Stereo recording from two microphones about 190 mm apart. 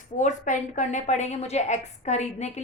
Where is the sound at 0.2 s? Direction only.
40° left (ahead or behind).